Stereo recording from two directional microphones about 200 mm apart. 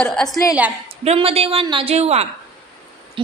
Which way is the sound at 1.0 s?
30° right (ahead or behind).